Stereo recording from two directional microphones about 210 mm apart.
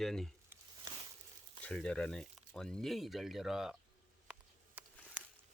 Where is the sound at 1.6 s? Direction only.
5° left (ahead or behind).